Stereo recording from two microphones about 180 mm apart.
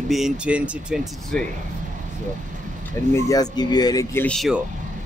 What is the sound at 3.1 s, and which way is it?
Speech, 20° left (ahead or behind).